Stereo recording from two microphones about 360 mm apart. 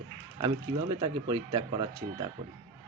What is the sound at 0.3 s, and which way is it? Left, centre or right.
Speech, centre.